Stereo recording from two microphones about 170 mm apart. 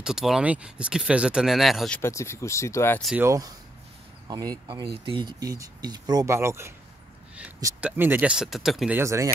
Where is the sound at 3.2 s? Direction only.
20° right (ahead or behind).